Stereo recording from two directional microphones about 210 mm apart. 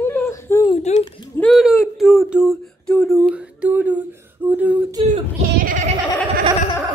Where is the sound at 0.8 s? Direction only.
30° left (ahead or behind).